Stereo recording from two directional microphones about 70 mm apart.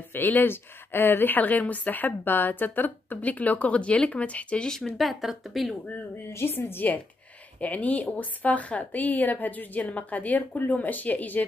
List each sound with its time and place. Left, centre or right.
0.1 s speech: left; by 5.8 s centre
6.3 s a woman's voice: left